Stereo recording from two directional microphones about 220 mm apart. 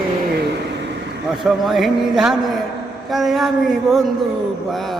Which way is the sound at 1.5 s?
Centre (ahead or behind).